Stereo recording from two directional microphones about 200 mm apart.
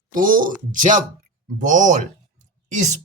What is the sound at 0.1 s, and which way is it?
Speech, 40° right (ahead or behind).